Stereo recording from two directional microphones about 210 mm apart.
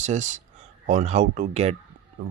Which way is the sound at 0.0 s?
35° right (ahead or behind).